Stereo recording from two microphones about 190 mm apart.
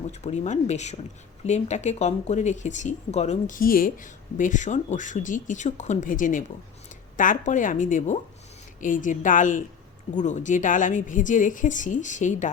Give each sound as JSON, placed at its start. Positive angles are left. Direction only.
{"t": 0.1, "sound": "speech", "side_deg": 40}